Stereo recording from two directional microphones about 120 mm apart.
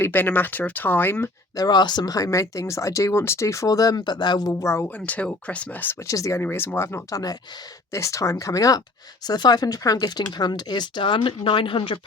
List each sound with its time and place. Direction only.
0.0 s speech: 15° left (ahead or behind)
1.5 s speech: 35° left (ahead or behind)
4.9 s speech: 10° left (ahead or behind); by 11.9 s 45° left (ahead or behind)